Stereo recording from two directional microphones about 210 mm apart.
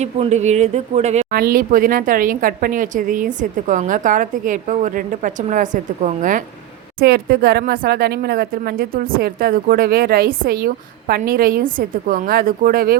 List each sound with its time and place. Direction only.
0.0 s speech: 30° right (ahead or behind)
1.3 s speech: 45° right (ahead or behind)
7.0 s speech: 50° right (ahead or behind)